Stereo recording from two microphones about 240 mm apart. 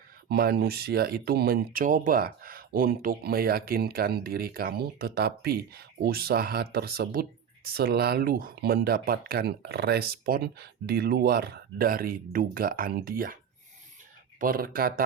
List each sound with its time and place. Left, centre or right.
0.3 s speech: right